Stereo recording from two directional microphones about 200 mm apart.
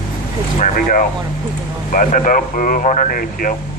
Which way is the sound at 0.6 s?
40° left (ahead or behind).